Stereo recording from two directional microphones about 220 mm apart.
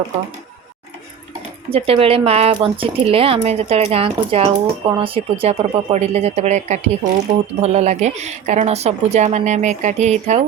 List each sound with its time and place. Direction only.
1.7 s a woman's voice: 25° right (ahead or behind)